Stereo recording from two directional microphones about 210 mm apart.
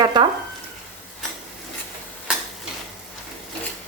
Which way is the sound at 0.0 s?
20° right (ahead or behind).